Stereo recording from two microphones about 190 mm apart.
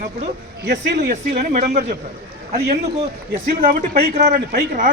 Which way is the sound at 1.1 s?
45° right (ahead or behind).